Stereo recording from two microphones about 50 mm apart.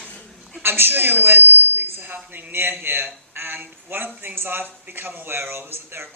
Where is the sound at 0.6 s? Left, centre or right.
Right.